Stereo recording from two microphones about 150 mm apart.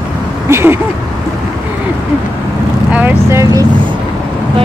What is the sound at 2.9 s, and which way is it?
Speech, 15° right (ahead or behind).